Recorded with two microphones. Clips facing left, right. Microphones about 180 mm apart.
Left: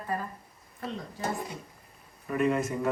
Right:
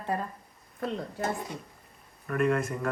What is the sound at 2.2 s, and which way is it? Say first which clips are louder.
Speech: even; centre (ahead or behind).